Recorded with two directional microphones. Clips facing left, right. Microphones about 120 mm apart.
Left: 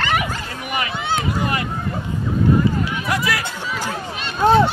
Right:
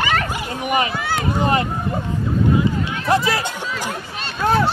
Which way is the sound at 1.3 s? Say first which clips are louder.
Right 4 dB; 30° right (ahead or behind).